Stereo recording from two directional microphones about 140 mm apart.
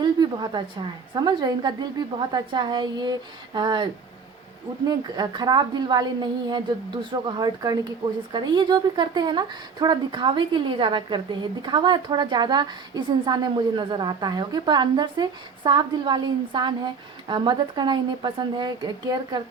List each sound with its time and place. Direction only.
0.0 s a woman's voice: 30° right (ahead or behind)
4.9 s a woman's voice: 30° right (ahead or behind)